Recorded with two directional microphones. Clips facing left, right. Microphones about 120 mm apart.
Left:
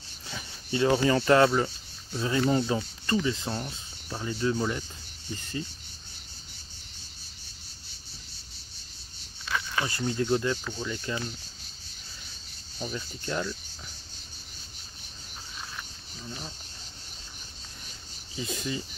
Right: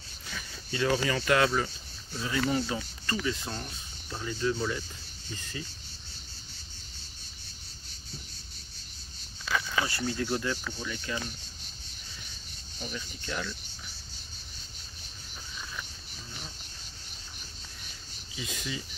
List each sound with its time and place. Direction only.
0.3 s speech: 25° left (ahead or behind)
9.8 s speech: 25° left (ahead or behind)
12.7 s speech: 30° left (ahead or behind)
18.3 s speech: 35° left (ahead or behind)